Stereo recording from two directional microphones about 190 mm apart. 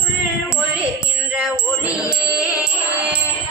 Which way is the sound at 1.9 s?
15° left (ahead or behind).